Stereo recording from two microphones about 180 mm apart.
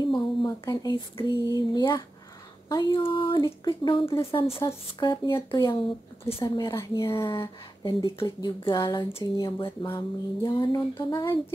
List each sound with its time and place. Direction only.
0.0 s a woman's voice: 25° left (ahead or behind)
4.6 s a woman's voice: 20° left (ahead or behind)